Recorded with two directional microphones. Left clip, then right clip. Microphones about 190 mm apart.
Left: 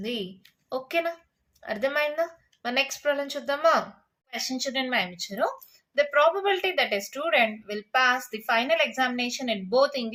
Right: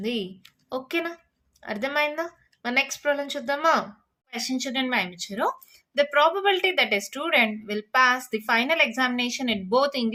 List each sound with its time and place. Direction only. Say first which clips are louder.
0.0 s speech: right 3 dB; 25° right (ahead or behind)